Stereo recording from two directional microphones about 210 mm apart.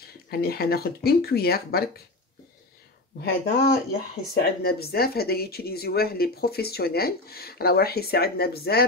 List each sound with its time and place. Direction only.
0.3 s speech: 45° left (ahead or behind)
3.2 s speech: 50° left (ahead or behind)